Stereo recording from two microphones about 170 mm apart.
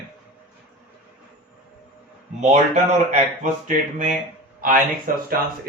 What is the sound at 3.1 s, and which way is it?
Speech, 45° right (ahead or behind).